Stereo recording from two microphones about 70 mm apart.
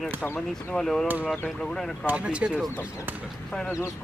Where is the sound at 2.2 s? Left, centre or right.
Centre.